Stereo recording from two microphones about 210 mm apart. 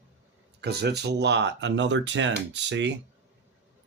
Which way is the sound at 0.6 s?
50° right (ahead or behind).